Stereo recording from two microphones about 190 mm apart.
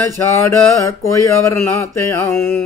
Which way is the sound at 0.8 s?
15° left (ahead or behind).